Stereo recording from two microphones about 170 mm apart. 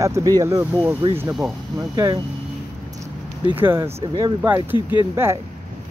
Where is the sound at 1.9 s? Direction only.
25° right (ahead or behind).